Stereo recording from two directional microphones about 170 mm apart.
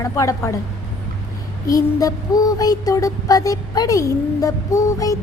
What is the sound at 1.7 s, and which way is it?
Music, 20° left (ahead or behind).